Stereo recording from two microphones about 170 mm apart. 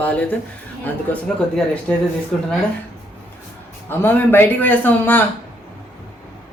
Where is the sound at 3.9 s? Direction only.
10° left (ahead or behind).